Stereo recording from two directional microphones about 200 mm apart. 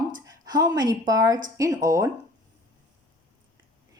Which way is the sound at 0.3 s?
20° right (ahead or behind).